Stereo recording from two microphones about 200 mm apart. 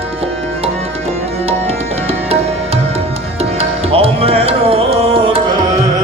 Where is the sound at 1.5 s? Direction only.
30° right (ahead or behind).